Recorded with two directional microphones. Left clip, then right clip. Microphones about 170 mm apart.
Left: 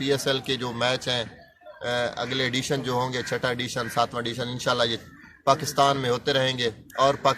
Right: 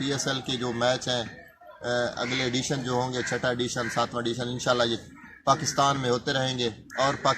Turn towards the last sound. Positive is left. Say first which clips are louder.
# left 3 dB
turn(degrees=15)  # may be behind; listen again after turning